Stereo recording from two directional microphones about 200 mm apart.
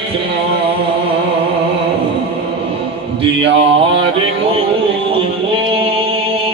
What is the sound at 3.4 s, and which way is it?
Mantra, 25° right (ahead or behind).